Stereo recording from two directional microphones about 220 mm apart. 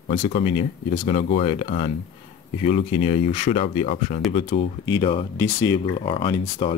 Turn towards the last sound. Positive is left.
turn(degrees=20)  # may be behind; listen again after turning